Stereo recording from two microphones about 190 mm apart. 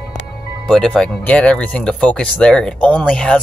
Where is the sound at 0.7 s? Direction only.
5° left (ahead or behind).